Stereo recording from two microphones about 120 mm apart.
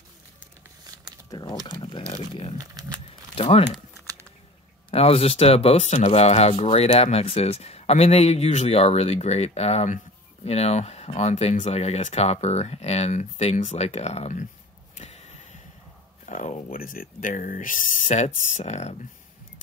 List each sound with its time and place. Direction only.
1.3 s speech: 30° left (ahead or behind)
2.5 s speech: 30° right (ahead or behind)
3.3 s speech: 50° left (ahead or behind)
3.9 s typing: 25° right (ahead or behind)
4.9 s speech: 55° left (ahead or behind); by 14.5 s 80° left
15.0 s a sound: 65° left (ahead or behind)
16.3 s a sound: 85° left
17.2 s speech: 90° left; by 18.9 s 70° left (ahead or behind)